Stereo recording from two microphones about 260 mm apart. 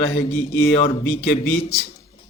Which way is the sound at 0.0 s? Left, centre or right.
Left.